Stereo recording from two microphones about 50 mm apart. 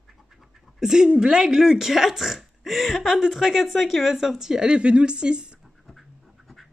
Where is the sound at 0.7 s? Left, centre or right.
Centre.